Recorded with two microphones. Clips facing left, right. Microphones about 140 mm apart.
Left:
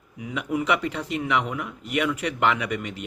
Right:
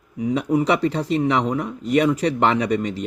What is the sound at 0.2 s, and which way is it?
Speech, 35° right (ahead or behind).